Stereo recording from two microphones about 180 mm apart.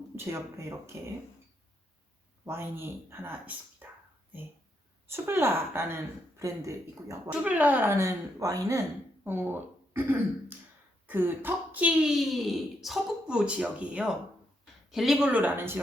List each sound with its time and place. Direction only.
0.3 s a woman's voice: 15° right (ahead or behind)
2.4 s a woman's voice: 15° right (ahead or behind)
5.1 s a woman's voice: 15° right (ahead or behind)